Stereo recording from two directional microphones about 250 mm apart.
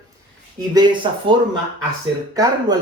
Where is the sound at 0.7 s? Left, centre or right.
Centre.